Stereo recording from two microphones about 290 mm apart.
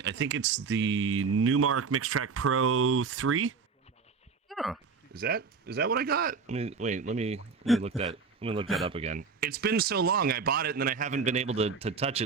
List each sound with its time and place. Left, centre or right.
0.0 s speech: right
4.4 s a sound: centre
5.1 s speech: right
8.6 s speech: centre
8.9 s speech: right